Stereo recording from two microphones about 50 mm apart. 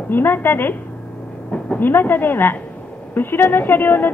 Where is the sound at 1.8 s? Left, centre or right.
Left.